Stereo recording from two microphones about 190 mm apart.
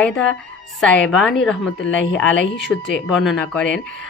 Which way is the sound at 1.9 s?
75° left (ahead or behind).